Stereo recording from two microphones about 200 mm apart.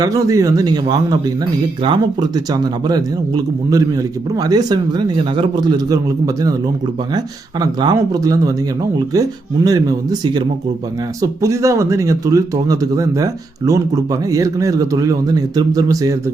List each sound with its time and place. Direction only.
0.0 s speech: 15° right (ahead or behind)
7.6 s speech: 20° right (ahead or behind)
9.6 s speech: 20° right (ahead or behind)